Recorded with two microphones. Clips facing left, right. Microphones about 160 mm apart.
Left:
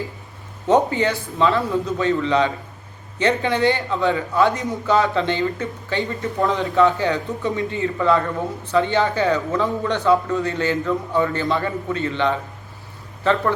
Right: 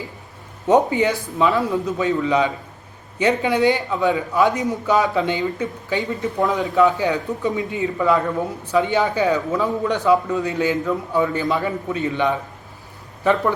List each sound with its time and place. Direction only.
0.7 s speech: 15° right (ahead or behind)